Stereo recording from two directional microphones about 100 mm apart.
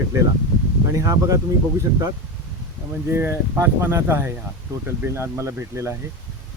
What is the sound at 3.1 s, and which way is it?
Speech, 20° right (ahead or behind).